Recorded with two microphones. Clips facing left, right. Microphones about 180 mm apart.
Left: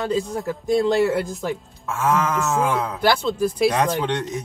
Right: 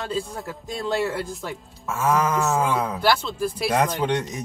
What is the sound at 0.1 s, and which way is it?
Speech, 20° left (ahead or behind).